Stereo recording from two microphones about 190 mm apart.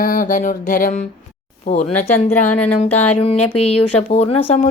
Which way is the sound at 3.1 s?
35° left (ahead or behind).